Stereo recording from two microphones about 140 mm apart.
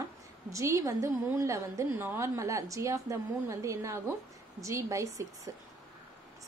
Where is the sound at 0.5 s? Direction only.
20° right (ahead or behind).